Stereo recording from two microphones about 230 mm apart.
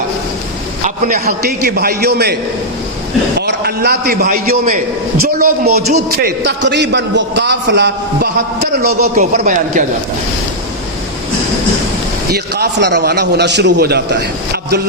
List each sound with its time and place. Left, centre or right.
1.0 s a man's voice: right
3.3 s a man's voice: right
12.3 s a man's voice: right